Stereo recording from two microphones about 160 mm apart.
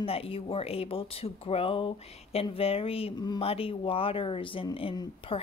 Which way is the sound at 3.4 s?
35° left (ahead or behind).